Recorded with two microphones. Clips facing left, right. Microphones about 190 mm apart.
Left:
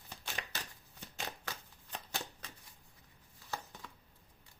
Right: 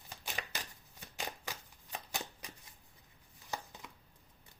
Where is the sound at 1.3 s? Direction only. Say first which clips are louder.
Right 1 dB; 15° right (ahead or behind).